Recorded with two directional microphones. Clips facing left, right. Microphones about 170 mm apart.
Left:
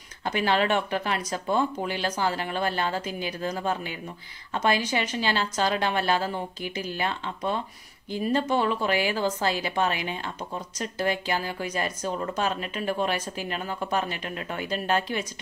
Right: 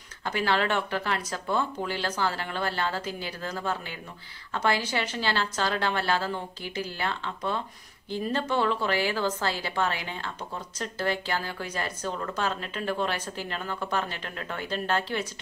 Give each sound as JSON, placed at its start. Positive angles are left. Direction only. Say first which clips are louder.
{"t": 0.2, "sound": "speech", "louder": "left 2 dB", "side_deg": 20}